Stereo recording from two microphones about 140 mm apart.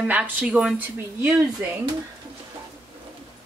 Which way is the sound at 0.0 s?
10° right (ahead or behind).